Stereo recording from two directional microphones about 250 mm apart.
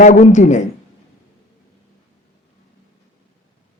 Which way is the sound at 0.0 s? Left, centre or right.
Left.